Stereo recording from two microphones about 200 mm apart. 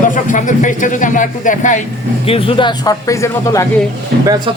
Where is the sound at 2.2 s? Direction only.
25° left (ahead or behind).